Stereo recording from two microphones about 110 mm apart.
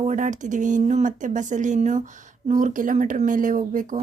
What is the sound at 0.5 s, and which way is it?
Speech, 90° right.